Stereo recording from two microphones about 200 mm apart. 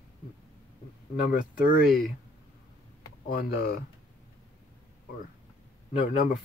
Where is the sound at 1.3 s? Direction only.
45° left (ahead or behind).